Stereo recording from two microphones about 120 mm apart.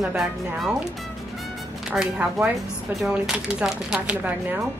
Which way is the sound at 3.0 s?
5° right (ahead or behind).